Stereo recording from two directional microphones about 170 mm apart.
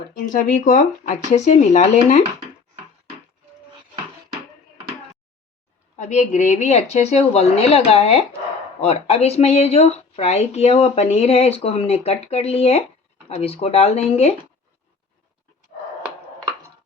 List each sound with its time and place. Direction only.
0.3 s speech: 50° left (ahead or behind)
6.0 s speech: 45° left (ahead or behind)